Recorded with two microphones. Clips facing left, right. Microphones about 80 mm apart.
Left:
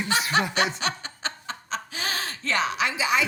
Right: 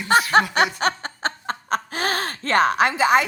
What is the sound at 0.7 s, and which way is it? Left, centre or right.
Snicker, right.